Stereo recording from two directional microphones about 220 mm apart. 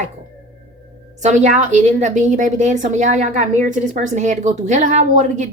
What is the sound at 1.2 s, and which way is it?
A woman's voice, 35° right (ahead or behind).